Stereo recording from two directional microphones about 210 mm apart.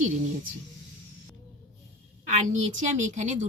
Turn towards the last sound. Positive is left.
turn(degrees=-35)  # may be behind; listen again after turning